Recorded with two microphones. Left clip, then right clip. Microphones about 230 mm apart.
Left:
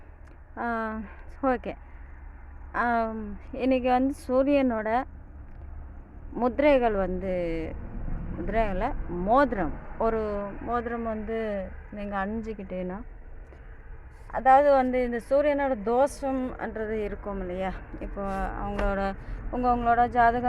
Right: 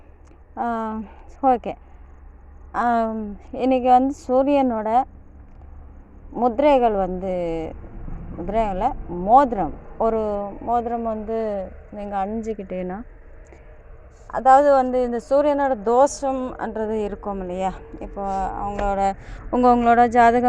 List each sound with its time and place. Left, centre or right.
0.5 s speech: centre
6.3 s speech: centre
14.3 s speech: right
19.5 s a woman's voice: right